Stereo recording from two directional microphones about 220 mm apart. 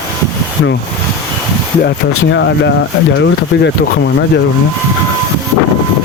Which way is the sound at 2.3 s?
55° left (ahead or behind).